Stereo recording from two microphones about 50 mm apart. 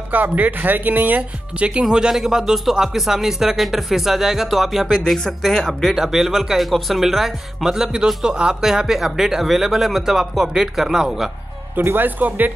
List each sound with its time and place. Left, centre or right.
0.1 s speech: right
1.7 s speech: centre
4.9 s speech: centre
5.9 s speech: centre
11.7 s speech: right